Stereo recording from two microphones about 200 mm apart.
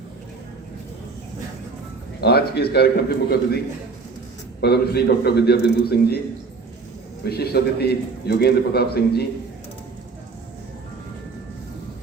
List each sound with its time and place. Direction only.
2.2 s a man's voice: 55° left (ahead or behind)
4.6 s a man's voice: 55° left (ahead or behind)
7.3 s a man's voice: 50° left (ahead or behind)